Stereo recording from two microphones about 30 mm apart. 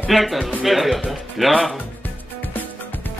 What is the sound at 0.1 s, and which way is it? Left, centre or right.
Speech, centre.